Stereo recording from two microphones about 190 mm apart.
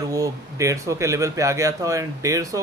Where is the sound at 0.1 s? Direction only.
15° right (ahead or behind).